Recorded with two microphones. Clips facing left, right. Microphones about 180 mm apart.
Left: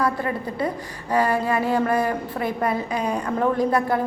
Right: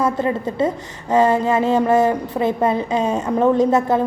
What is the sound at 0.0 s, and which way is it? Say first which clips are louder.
A woman's voice: right 5 dB; 20° right (ahead or behind).